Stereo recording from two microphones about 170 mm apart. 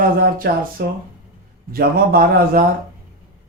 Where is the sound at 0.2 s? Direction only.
60° right (ahead or behind).